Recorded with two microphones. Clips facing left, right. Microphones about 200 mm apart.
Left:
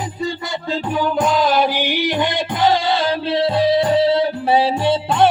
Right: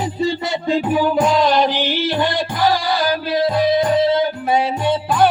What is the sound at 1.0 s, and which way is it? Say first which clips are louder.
Music: left 1 dB; 5° right (ahead or behind).